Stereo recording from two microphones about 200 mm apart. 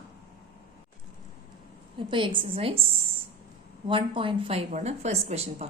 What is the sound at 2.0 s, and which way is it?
Speech, 25° right (ahead or behind).